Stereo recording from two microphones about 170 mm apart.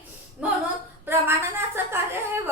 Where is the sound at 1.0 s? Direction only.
15° right (ahead or behind).